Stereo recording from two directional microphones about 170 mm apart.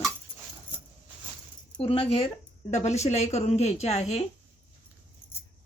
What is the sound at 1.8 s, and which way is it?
A woman's voice, 35° left (ahead or behind).